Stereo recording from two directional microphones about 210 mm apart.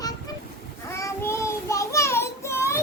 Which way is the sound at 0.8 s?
15° left (ahead or behind).